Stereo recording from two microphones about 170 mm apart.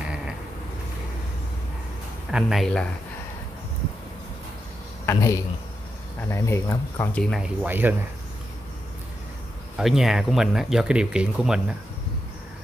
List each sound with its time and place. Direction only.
0.0 s creak: 5° right (ahead or behind)
2.3 s speech: centre (ahead or behind)
5.0 s speech: 15° left (ahead or behind)
7.2 s speech: 5° right (ahead or behind)
9.8 s speech: centre (ahead or behind)